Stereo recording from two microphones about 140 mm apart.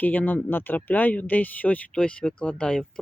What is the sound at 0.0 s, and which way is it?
Speech, 10° left (ahead or behind).